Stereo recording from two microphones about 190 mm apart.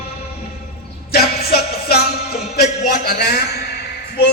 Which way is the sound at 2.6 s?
40° left (ahead or behind).